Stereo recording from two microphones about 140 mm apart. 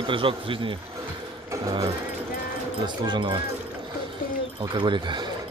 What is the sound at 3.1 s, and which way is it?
Speech, 35° right (ahead or behind).